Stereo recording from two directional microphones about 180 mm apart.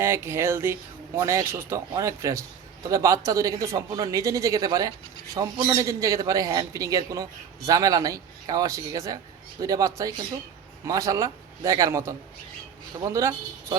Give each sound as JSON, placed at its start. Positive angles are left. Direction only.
{"t": 0.0, "sound": "speech", "side_deg": -15}